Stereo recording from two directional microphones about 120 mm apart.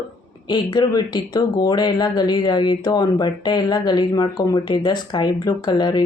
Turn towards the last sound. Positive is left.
turn(degrees=35)  # may be behind; listen again after turning